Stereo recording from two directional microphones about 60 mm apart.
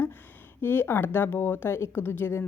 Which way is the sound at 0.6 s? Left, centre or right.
Left.